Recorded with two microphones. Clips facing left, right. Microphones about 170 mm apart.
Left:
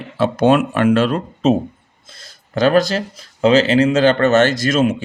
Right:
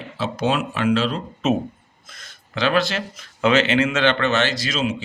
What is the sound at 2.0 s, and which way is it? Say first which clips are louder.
Speech: left 2 dB; 30° left (ahead or behind).